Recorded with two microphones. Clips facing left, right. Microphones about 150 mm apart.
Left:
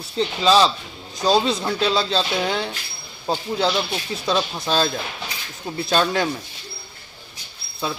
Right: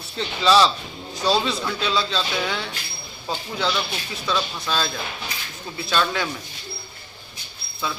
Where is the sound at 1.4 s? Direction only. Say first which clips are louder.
Left 4 dB; 35° left (ahead or behind).